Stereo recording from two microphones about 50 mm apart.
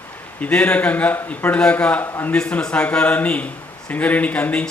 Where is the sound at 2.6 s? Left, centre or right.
Left.